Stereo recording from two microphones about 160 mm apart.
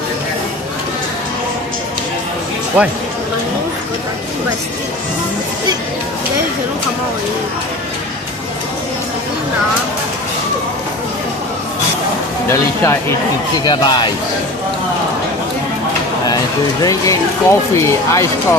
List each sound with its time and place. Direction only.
12.5 s speech: 15° left (ahead or behind)
13.7 s speech: 25° left (ahead or behind)
16.8 s speech: 20° left (ahead or behind)